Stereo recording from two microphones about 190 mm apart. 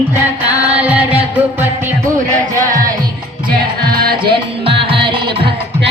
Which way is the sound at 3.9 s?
55° right (ahead or behind).